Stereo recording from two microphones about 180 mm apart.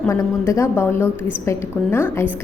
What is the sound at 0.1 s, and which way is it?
A woman's voice, 15° left (ahead or behind).